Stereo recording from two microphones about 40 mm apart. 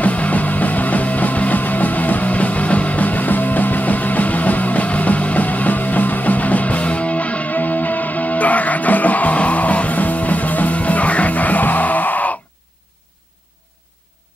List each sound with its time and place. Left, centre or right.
0.0 s music: left